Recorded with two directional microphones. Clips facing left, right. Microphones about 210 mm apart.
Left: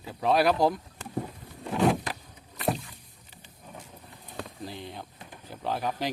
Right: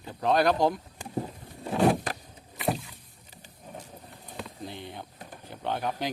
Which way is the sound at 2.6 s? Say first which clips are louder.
Even; centre (ahead or behind).